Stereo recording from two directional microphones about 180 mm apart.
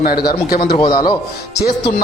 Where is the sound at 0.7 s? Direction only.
25° left (ahead or behind).